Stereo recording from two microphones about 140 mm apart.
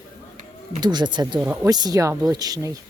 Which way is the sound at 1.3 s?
10° right (ahead or behind).